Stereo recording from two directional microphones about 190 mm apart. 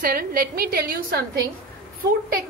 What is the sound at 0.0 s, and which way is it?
A woman's voice, 50° right (ahead or behind).